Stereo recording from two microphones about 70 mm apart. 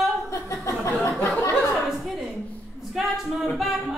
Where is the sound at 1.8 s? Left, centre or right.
Centre.